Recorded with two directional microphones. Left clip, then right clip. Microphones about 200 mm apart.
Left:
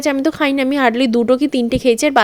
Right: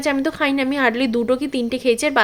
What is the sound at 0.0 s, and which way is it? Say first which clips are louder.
A woman's voice: left 3 dB; 30° left (ahead or behind).